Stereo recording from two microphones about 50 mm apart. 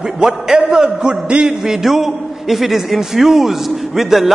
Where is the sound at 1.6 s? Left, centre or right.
Centre.